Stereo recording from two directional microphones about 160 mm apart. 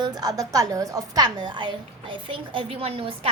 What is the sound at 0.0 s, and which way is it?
A woman's voice, 25° right (ahead or behind).